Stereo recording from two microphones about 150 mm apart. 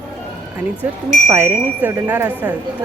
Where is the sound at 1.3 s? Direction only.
15° right (ahead or behind).